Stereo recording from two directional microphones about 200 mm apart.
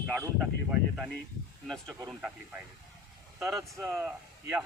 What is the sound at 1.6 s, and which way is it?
Speech, centre (ahead or behind).